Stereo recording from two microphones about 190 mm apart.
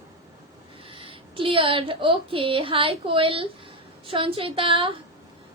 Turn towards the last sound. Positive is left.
turn(degrees=-25)  # may be behind; listen again after turning